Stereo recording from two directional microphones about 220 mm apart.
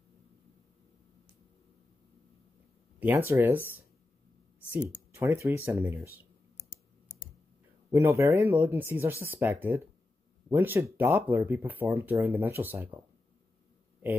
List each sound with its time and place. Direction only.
3.0 s speech: 10° right (ahead or behind)
4.6 s speech: 10° right (ahead or behind)
7.9 s speech: 10° right (ahead or behind)